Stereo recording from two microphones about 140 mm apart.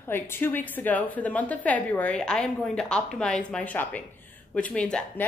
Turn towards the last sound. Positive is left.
turn(degrees=5)  # may be behind; listen again after turning